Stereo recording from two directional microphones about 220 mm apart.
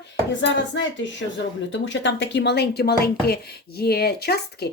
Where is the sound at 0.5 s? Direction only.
55° left (ahead or behind).